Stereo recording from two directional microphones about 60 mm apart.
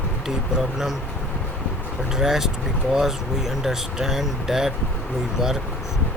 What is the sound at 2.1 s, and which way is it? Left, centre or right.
Speech, centre.